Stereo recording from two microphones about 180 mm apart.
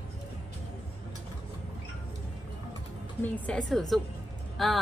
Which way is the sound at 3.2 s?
10° left (ahead or behind).